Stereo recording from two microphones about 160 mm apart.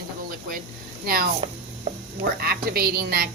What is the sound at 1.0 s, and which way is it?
A woman's voice, 70° right (ahead or behind).